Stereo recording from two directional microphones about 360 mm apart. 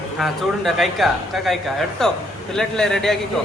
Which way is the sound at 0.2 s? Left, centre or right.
Centre.